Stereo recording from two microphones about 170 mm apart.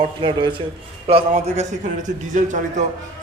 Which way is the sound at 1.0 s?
40° right (ahead or behind).